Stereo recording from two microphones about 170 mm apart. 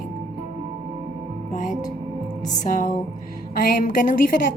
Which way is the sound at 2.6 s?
50° left (ahead or behind).